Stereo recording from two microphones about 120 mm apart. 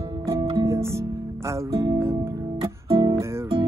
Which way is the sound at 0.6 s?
25° right (ahead or behind).